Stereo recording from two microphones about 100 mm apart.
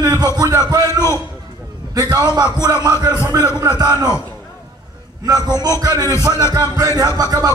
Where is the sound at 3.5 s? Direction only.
40° right (ahead or behind).